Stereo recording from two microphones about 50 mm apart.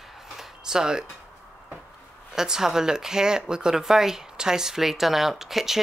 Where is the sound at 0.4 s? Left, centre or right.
Centre.